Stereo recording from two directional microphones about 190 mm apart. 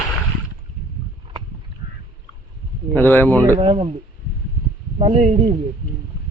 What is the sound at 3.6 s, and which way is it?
Speech, 30° right (ahead or behind).